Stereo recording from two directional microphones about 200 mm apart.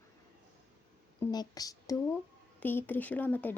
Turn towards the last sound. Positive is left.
turn(degrees=10)  # may be behind; listen again after turning